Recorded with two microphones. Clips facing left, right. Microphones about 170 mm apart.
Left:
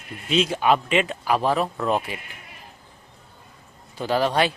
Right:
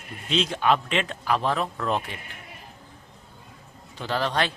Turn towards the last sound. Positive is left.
turn(degrees=10)  # may be behind; listen again after turning